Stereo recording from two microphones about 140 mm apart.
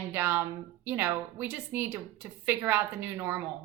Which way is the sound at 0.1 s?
15° right (ahead or behind).